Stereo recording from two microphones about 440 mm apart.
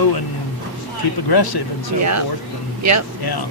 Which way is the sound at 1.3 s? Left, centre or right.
Left.